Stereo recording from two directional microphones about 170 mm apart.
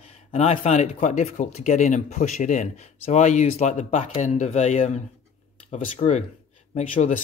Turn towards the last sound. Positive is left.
turn(degrees=45)  # may be behind; listen again after turning